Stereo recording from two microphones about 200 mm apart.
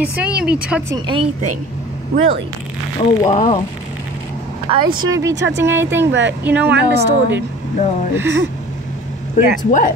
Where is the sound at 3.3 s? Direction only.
30° left (ahead or behind).